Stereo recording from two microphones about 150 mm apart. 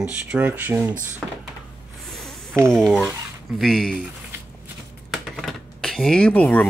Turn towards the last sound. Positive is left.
turn(degrees=10)  # may be behind; listen again after turning